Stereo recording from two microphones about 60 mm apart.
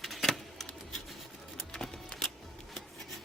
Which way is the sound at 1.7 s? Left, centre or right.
Centre.